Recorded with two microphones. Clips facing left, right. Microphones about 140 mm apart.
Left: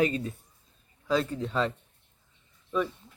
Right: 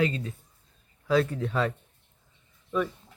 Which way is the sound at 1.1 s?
10° right (ahead or behind).